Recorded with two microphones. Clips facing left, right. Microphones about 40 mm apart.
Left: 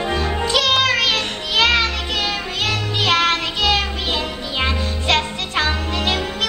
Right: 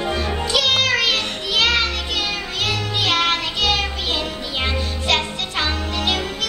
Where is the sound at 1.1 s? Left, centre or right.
Left.